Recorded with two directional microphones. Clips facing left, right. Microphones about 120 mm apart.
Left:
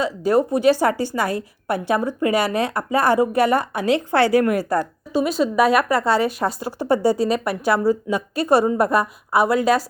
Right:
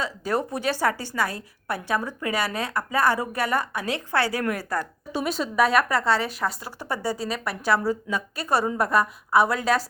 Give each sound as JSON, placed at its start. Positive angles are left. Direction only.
{"t": 0.0, "sound": "a woman's voice", "side_deg": 10}
{"t": 5.1, "sound": "speech", "side_deg": 5}